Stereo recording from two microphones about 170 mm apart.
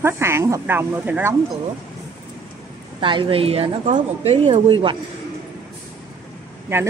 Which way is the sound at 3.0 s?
30° right (ahead or behind).